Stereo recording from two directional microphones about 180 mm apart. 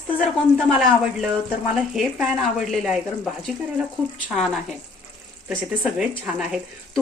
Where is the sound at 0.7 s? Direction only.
Centre (ahead or behind).